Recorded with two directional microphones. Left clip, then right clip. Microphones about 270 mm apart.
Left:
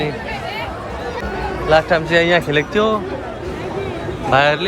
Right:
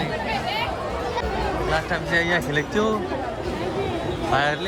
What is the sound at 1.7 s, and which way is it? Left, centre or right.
Speech, centre.